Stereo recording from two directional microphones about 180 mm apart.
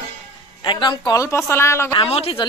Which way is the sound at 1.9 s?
30° left (ahead or behind).